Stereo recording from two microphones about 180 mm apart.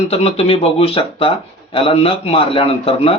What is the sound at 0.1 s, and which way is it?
Speech, 35° left (ahead or behind).